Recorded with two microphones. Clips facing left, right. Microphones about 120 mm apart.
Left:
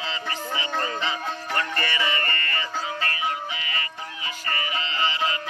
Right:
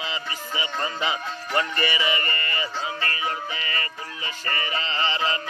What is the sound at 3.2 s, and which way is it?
Music, 40° right (ahead or behind).